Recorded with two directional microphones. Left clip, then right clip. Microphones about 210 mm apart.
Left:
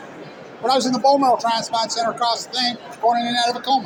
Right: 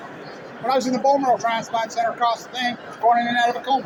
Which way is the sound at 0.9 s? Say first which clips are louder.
Left 3 dB; 30° left (ahead or behind).